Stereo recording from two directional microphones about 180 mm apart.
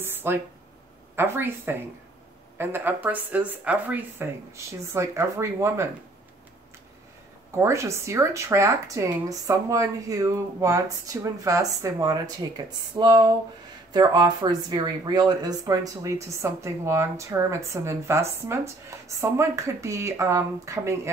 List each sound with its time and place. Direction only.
0.0 s a sound: 10° right (ahead or behind)
1.1 s speech: 10° right (ahead or behind)
7.5 s speech: 15° right (ahead or behind)